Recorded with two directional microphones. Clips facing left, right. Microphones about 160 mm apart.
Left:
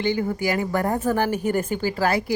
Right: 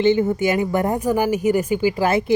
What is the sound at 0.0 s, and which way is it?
A woman's voice, 20° right (ahead or behind).